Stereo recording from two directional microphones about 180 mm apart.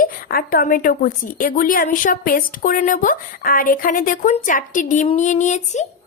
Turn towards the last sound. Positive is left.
turn(degrees=40)  # may be behind; listen again after turning